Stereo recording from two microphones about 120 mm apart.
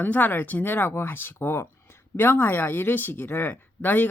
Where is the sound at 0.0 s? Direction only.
15° left (ahead or behind).